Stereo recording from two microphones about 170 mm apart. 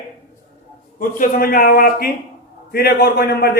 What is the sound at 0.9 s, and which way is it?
A man's voice, 55° left (ahead or behind).